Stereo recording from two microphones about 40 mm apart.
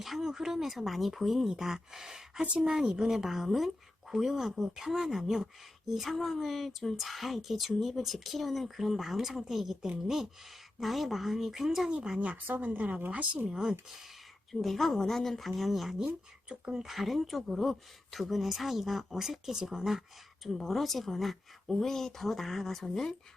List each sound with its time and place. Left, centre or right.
0.0 s speech: centre
2.4 s speech: right
2.7 s speech: centre
12.5 s speech: right
13.5 s speech: centre
14.5 s speech: centre
16.5 s speech: right
16.8 s speech: centre
19.5 s speech: centre
20.7 s speech: centre